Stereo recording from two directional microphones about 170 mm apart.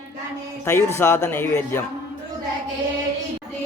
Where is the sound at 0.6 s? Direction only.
15° left (ahead or behind).